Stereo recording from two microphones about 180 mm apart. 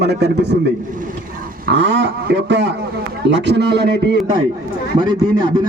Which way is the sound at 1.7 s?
80° right.